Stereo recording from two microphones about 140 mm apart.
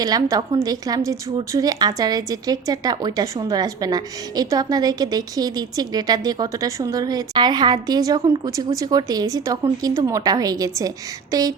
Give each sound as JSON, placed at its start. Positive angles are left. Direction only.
{"t": 0.0, "sound": "speech", "side_deg": -25}